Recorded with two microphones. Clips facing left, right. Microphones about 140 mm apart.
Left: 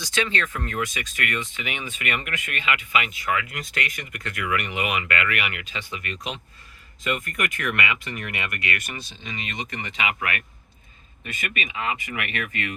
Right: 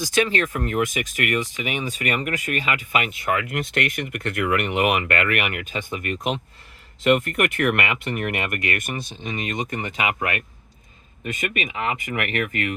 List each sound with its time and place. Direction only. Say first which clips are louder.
0.0 s speech: right 5 dB; 45° right (ahead or behind)
7.0 s speech: right 8 dB; 70° right (ahead or behind); by 12.7 s 45° right (ahead or behind)